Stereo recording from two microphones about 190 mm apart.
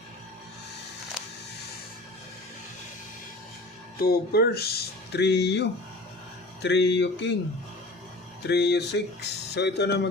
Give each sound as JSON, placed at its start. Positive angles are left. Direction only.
{"t": 4.0, "sound": "speech", "side_deg": 55}
{"t": 8.4, "sound": "speech", "side_deg": 60}